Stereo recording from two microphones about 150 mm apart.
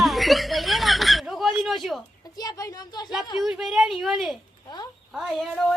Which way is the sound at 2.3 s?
25° left (ahead or behind).